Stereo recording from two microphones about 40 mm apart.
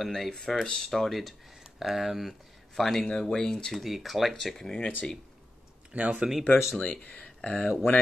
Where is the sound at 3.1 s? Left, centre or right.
Centre.